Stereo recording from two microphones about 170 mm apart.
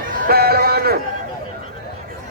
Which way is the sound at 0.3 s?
65° right (ahead or behind).